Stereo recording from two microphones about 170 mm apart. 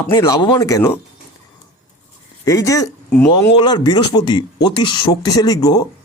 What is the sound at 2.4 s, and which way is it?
Speech, 20° left (ahead or behind).